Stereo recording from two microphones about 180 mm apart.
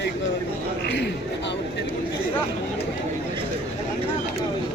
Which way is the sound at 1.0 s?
80° left.